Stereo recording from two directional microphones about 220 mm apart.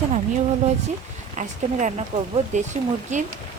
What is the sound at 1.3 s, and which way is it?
Speech, 35° right (ahead or behind).